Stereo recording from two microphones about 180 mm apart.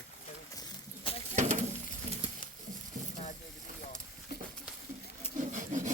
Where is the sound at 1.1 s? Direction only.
30° left (ahead or behind).